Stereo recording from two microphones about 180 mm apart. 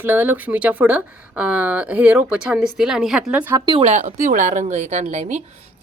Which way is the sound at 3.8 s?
40° right (ahead or behind).